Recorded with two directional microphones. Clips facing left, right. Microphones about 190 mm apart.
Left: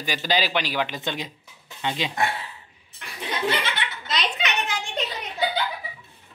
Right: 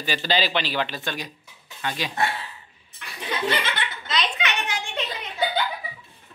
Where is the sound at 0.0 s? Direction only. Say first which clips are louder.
Even; 10° left (ahead or behind).